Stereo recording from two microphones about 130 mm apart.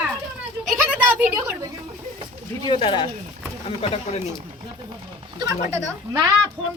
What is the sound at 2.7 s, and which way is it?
Speech, 40° left (ahead or behind).